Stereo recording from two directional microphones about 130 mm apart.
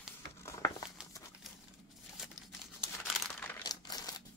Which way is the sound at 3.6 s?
30° left (ahead or behind).